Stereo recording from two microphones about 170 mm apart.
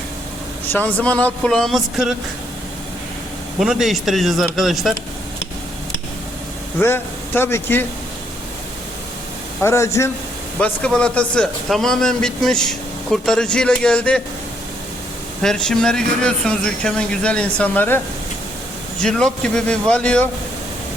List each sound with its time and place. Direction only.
0.7 s speech: 10° left (ahead or behind)
3.6 s a man's voice: centre (ahead or behind)
6.8 s speech: 15° left (ahead or behind)
9.6 s speech: 15° left (ahead or behind)
10.6 s a man's voice: 5° left (ahead or behind)
15.4 s a man's voice: 5° left (ahead or behind)
19.0 s a man's voice: 5° left (ahead or behind)